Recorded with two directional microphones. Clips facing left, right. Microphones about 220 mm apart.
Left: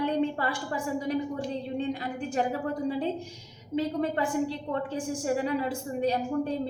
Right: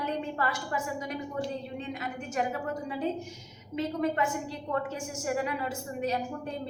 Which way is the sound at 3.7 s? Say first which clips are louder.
Left 2 dB; 30° left (ahead or behind).